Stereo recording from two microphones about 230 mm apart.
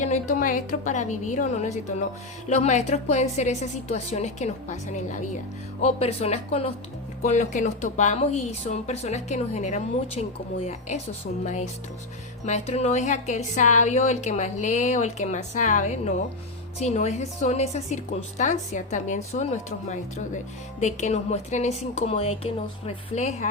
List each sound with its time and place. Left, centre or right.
0.0 s a woman's voice: left